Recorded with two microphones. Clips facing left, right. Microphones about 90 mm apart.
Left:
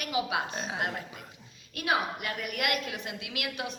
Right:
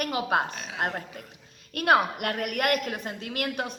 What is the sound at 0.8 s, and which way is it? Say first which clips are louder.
A woman's voice: right 3 dB; 45° right (ahead or behind).